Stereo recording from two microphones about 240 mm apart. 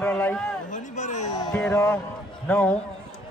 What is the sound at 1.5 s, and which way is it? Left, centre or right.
Speech, centre.